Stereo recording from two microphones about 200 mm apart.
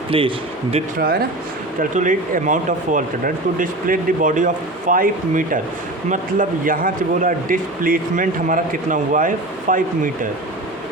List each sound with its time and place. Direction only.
0.1 s speech: 25° right (ahead or behind)
0.9 s a man's voice: 45° right (ahead or behind)
6.7 s a man's voice: 45° right (ahead or behind)